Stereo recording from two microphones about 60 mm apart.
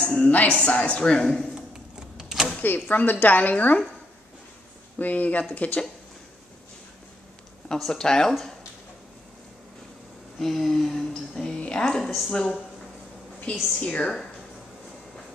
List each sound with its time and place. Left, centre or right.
0.2 s a woman's voice: left
2.1 s a sound: centre
2.6 s a woman's voice: left
4.9 s a woman's voice: left
7.9 s speech: centre
10.4 s a woman's voice: centre